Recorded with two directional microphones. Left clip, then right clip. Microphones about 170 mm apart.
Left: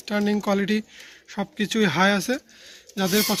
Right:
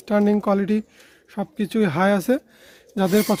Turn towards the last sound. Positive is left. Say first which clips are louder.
# right 3 dB
turn(degrees=-50)  # may be behind; listen again after turning